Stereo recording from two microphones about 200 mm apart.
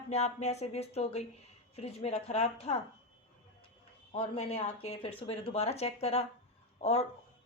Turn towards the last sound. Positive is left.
turn(degrees=35)  # may be behind; listen again after turning